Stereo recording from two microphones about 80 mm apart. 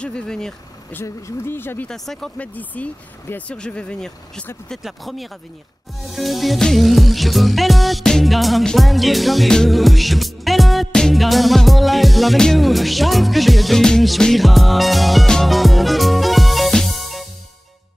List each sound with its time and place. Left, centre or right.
0.0 s speech: centre
1.0 s speech: left
1.9 s speech: centre
2.3 s speech: centre
4.8 s speech: centre
6.0 s music: centre